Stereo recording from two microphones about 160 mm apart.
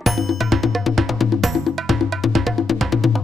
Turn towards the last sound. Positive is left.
turn(degrees=0)  # may be behind; listen again after turning